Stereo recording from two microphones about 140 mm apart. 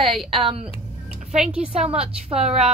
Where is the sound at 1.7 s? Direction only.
45° right (ahead or behind).